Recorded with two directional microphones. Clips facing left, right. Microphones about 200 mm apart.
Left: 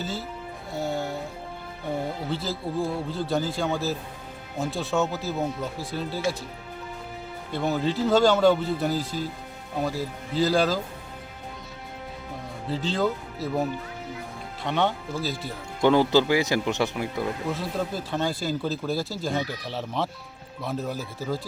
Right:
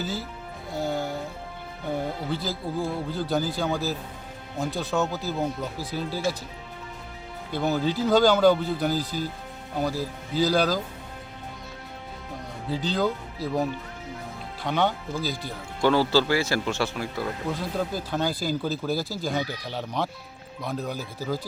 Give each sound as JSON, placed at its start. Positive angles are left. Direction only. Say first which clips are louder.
{"t": 0.0, "sound": "speech", "louder": "right 1 dB", "side_deg": 0}
{"t": 0.7, "sound": "music", "louder": "right 1 dB", "side_deg": 0}
{"t": 2.3, "sound": "speech", "louder": "left 2 dB", "side_deg": 0}
{"t": 7.5, "sound": "speech", "louder": "even", "side_deg": 0}
{"t": 12.6, "sound": "speech", "louder": "even", "side_deg": 0}
{"t": 15.8, "sound": "speech", "louder": "left 2 dB", "side_deg": 20}
{"t": 17.5, "sound": "speech", "louder": "even", "side_deg": 0}